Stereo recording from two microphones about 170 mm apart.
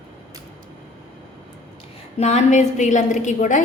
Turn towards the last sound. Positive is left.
turn(degrees=45)  # may be behind; listen again after turning